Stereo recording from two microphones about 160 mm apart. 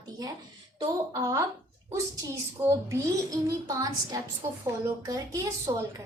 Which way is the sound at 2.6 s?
20° right (ahead or behind).